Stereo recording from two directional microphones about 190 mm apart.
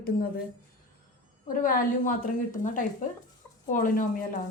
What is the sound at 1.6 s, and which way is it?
A woman's voice, 45° left (ahead or behind).